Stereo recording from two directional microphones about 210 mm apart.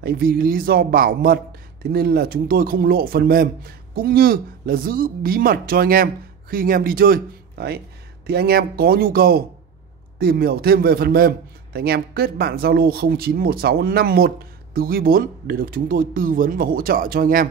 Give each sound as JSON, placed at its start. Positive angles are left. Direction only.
{"t": 0.0, "sound": "a man's voice", "side_deg": -45}